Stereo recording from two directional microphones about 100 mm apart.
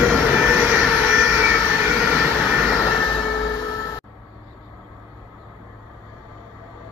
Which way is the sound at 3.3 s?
40° left (ahead or behind).